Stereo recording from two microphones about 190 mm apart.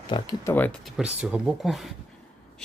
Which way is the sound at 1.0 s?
5° right (ahead or behind).